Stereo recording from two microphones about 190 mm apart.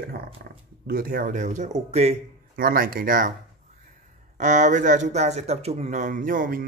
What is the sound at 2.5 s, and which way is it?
Speech, 50° right (ahead or behind).